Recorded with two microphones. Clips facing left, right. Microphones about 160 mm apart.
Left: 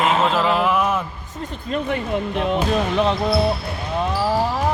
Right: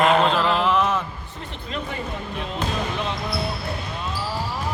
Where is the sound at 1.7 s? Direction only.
65° left (ahead or behind).